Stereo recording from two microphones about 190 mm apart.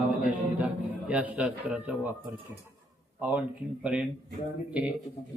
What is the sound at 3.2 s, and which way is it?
Speech, 10° right (ahead or behind).